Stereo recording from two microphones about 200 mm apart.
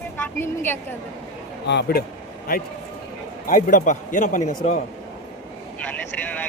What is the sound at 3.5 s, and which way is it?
A man's voice, 40° left (ahead or behind).